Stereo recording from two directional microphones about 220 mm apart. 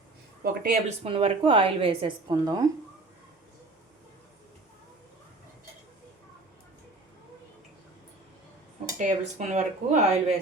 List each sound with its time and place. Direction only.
0.4 s speech: 40° right (ahead or behind)
1.0 s a woman's voice: 25° right (ahead or behind)
9.0 s speech: 35° right (ahead or behind)